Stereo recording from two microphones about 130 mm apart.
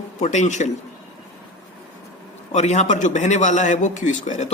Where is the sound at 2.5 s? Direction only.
65° left (ahead or behind).